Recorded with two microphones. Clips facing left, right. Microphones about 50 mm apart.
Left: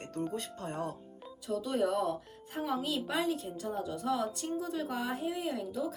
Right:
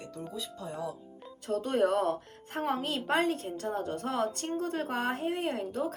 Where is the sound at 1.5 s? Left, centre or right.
Right.